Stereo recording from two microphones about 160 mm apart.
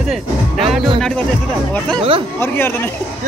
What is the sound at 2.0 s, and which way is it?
Speech, 35° right (ahead or behind).